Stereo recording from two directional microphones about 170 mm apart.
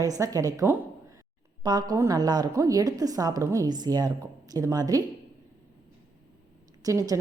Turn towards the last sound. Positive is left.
turn(degrees=-20)  # may be behind; listen again after turning